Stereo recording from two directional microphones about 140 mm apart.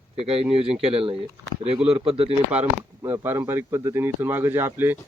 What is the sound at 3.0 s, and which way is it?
Speech, 20° right (ahead or behind).